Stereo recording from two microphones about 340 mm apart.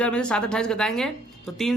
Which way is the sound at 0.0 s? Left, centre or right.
Centre.